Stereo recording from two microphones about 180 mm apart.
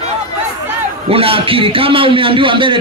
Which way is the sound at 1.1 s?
30° right (ahead or behind).